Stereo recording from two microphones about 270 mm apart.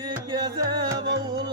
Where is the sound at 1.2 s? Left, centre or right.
Centre.